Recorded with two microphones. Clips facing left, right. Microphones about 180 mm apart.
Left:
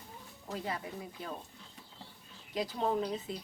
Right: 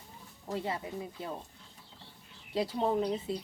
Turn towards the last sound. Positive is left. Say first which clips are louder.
# right 3 dB
turn(degrees=-25)  # may be behind; listen again after turning